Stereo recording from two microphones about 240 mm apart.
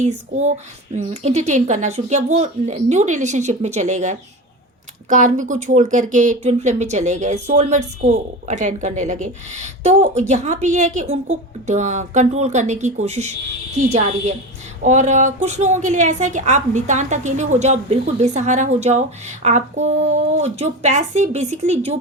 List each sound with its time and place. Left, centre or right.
0.0 s speech: right